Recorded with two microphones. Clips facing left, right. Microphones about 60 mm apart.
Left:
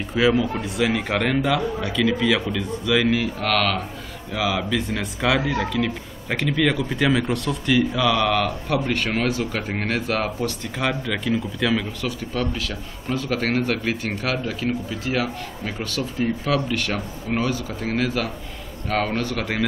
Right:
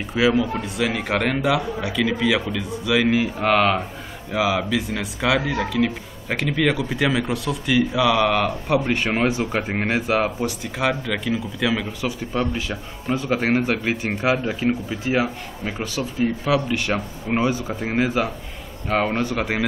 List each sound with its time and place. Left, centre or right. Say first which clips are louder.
0.1 s speech: even; centre